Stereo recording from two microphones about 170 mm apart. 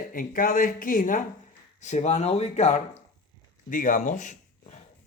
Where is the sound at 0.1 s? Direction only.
55° left (ahead or behind).